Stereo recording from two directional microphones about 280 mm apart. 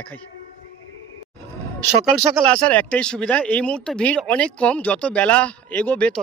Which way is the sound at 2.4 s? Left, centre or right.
Centre.